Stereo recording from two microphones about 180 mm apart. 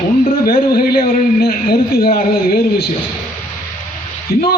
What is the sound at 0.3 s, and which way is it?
A man's voice, 55° left (ahead or behind).